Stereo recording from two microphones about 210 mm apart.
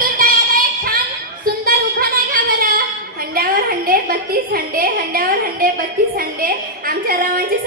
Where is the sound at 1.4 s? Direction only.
45° right (ahead or behind).